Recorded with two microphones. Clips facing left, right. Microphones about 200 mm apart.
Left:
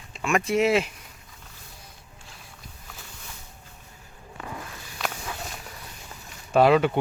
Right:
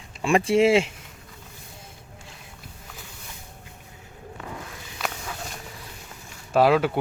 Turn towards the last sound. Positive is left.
turn(degrees=-5)  # may be behind; listen again after turning